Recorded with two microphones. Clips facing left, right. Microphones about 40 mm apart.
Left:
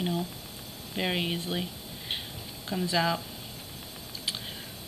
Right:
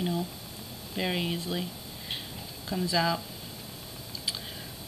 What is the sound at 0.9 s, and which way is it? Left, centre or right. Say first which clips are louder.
Speech: left 1 dB; centre.